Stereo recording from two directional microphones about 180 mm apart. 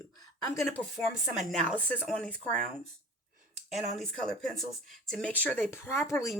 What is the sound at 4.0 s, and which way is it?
Speech, centre (ahead or behind).